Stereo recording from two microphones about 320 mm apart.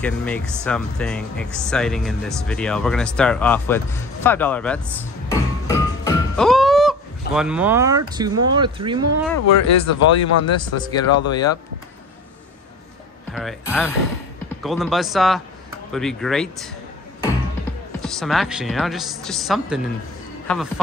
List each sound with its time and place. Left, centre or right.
0.0 s speech: centre
5.3 s music: centre
9.5 s speech: left
10.6 s speech: centre
13.3 s speech: centre
18.0 s speech: centre